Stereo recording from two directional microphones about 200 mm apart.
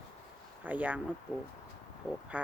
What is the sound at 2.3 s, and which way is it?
Speech, 5° right (ahead or behind).